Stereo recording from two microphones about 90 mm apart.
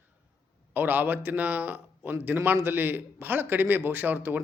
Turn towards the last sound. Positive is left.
turn(degrees=-20)  # may be behind; listen again after turning